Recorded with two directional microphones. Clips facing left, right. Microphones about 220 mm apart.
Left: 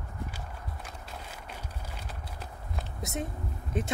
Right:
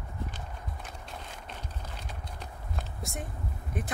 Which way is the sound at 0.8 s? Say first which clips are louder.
Even; 5° left (ahead or behind).